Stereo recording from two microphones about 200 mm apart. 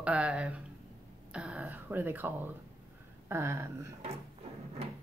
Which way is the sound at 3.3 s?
10° right (ahead or behind).